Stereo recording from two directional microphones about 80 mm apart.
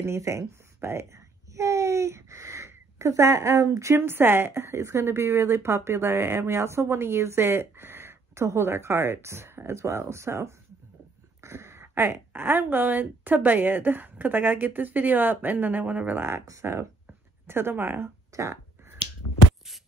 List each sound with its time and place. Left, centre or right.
0.0 s a child's voice: right
3.9 s a woman's voice: right
18.3 s speech: right